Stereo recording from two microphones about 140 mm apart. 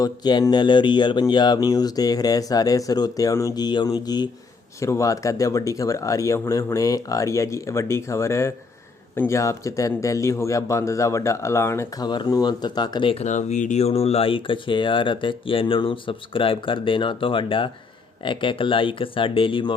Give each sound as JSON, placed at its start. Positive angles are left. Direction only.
{"t": 0.0, "sound": "speech", "side_deg": 30}
{"t": 12.0, "sound": "speech", "side_deg": 30}
{"t": 13.2, "sound": "speech", "side_deg": 60}